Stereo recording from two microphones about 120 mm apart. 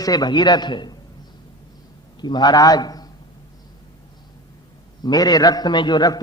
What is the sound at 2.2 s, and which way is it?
Speech, 35° left (ahead or behind).